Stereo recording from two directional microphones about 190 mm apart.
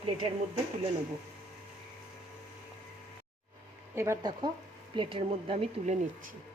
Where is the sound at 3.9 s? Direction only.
15° right (ahead or behind); by 6.1 s 35° right (ahead or behind).